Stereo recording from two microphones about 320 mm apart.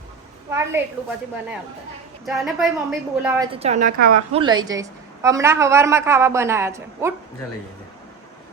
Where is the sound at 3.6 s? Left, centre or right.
Right.